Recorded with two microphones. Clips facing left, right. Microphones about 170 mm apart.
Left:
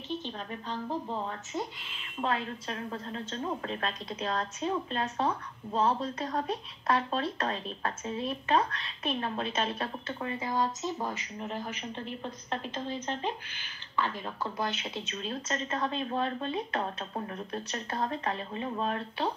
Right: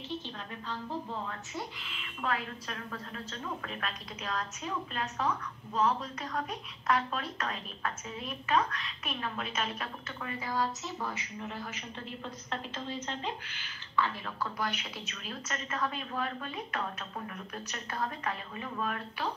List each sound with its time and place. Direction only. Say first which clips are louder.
2.0 s a woman's voice: left 3 dB; 25° left (ahead or behind)